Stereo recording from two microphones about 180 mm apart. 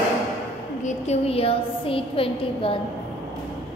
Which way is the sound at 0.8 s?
40° left (ahead or behind).